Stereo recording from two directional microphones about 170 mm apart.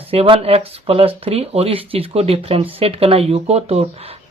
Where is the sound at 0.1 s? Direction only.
35° right (ahead or behind).